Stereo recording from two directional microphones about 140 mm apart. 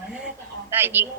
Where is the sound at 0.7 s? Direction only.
15° right (ahead or behind).